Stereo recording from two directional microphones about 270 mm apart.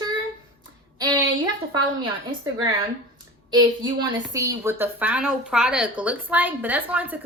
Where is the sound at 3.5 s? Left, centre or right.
Centre.